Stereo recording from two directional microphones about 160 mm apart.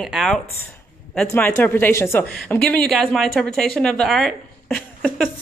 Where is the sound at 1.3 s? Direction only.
10° left (ahead or behind).